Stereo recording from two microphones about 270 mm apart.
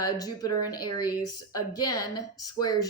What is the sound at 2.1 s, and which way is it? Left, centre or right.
Speech, centre.